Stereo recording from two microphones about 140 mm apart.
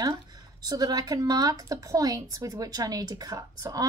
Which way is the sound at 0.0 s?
30° right (ahead or behind).